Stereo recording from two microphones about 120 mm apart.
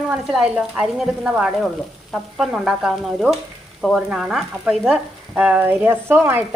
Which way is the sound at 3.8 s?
Centre (ahead or behind).